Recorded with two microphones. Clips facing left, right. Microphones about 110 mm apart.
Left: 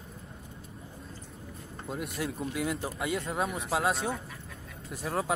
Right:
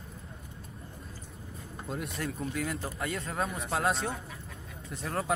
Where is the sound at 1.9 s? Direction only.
5° left (ahead or behind).